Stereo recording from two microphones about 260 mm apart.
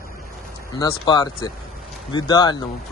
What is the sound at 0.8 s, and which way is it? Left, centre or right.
Speech, centre.